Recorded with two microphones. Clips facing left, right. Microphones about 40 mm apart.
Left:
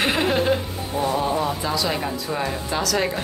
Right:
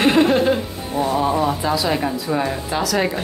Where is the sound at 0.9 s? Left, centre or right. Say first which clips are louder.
Right 3 dB; centre.